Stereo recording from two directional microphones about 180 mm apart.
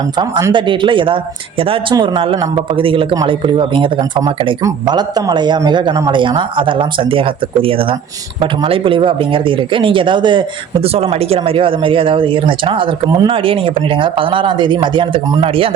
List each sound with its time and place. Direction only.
0.2 s speech: 25° right (ahead or behind)